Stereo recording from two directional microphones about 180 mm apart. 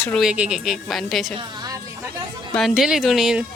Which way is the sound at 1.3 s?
25° right (ahead or behind).